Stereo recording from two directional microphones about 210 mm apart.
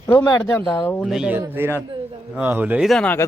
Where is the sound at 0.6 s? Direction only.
5° left (ahead or behind).